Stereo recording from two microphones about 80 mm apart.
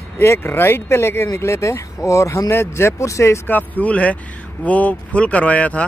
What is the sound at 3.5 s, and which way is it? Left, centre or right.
Speech, left.